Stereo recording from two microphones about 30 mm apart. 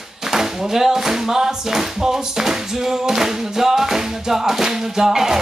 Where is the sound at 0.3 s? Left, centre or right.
Centre.